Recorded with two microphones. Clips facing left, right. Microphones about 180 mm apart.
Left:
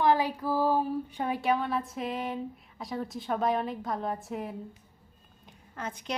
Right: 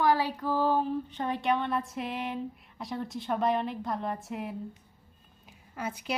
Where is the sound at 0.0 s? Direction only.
20° left (ahead or behind).